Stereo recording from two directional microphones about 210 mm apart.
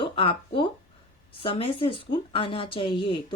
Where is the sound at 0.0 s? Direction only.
25° left (ahead or behind).